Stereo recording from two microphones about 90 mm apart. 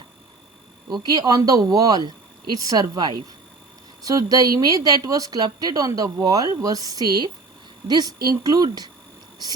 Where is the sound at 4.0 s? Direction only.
45° right (ahead or behind).